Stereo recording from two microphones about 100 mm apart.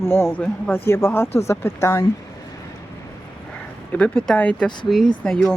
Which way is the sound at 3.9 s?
15° left (ahead or behind).